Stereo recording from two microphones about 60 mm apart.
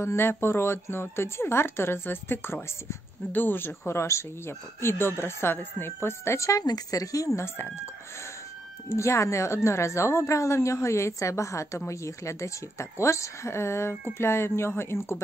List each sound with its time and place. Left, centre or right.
0.0 s a woman's voice: left
7.3 s a woman's voice: left
8.9 s a woman's voice: left